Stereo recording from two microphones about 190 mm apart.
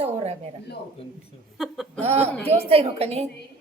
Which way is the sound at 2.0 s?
35° right (ahead or behind).